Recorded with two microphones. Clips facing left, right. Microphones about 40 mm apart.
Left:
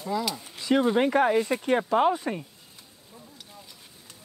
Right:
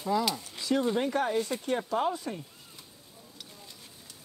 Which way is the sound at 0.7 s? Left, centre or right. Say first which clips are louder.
Left 5 dB; left.